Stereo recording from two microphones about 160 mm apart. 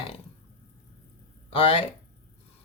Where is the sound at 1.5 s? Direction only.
35° left (ahead or behind).